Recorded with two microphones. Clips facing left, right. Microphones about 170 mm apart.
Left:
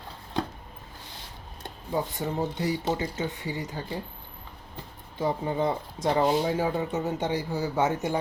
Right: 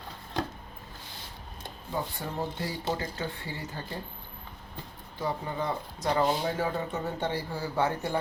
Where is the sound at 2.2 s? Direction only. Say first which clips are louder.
Left 5 dB; 20° left (ahead or behind).